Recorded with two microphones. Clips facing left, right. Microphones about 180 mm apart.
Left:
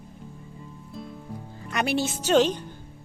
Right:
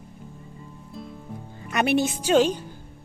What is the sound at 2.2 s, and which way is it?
Speech, 10° right (ahead or behind).